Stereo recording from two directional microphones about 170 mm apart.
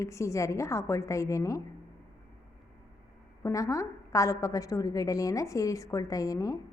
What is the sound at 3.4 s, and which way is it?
A woman's voice, 20° left (ahead or behind).